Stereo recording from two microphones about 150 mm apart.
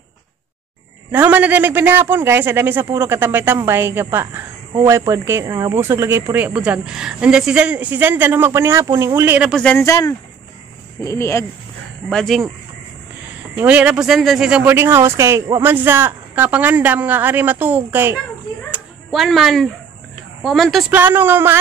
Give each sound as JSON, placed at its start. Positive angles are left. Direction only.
{"t": 1.1, "sound": "speech", "side_deg": -10}
{"t": 9.5, "sound": "speech", "side_deg": 5}
{"t": 9.8, "sound": "speech", "side_deg": 20}
{"t": 12.1, "sound": "speech", "side_deg": 5}
{"t": 13.6, "sound": "speech", "side_deg": -10}
{"t": 19.0, "sound": "speech", "side_deg": 0}
{"t": 20.9, "sound": "speech", "side_deg": -10}